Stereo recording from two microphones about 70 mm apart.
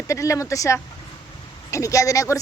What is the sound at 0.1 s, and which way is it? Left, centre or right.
Speech, left.